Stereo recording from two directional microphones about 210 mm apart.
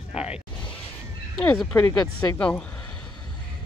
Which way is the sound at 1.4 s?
10° left (ahead or behind).